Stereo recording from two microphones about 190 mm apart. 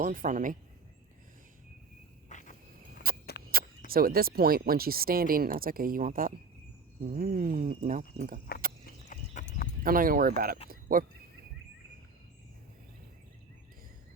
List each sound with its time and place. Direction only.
0.0 s speech: 45° right (ahead or behind)
2.3 s cricket: 40° left (ahead or behind)
3.1 s a sound: 50° right (ahead or behind)
3.5 s speech: 50° right (ahead or behind)
9.0 s horse: 40° left (ahead or behind)
9.8 s speech: 50° right (ahead or behind)
10.7 s a sound: 50° right (ahead or behind)